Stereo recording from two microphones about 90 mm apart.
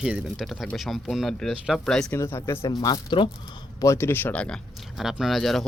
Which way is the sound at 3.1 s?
70° left (ahead or behind).